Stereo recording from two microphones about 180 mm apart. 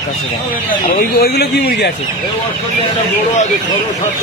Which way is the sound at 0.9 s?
60° left (ahead or behind).